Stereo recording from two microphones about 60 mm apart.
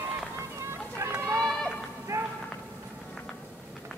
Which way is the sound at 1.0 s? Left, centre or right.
Right.